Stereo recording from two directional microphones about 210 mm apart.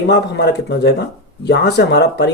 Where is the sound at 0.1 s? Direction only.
50° left (ahead or behind).